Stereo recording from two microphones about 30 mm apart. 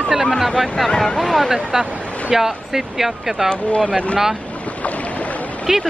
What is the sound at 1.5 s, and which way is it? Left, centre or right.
Speech, centre.